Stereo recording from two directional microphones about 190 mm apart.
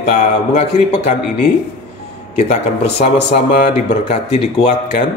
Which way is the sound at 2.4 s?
35° left (ahead or behind).